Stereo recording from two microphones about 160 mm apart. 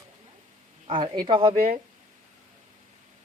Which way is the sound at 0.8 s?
30° right (ahead or behind).